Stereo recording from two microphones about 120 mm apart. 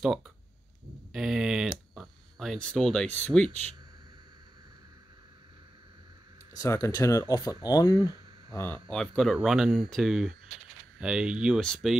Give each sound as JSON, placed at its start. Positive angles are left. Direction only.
{"t": 1.1, "sound": "speech", "side_deg": -5}
{"t": 6.5, "sound": "speech", "side_deg": 30}
{"t": 8.8, "sound": "speech", "side_deg": 5}